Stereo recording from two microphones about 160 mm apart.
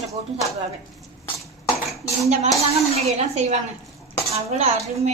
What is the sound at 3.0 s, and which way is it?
A woman's voice, 40° right (ahead or behind).